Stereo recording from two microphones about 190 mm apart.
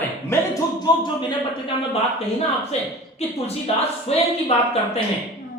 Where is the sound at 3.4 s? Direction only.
35° left (ahead or behind).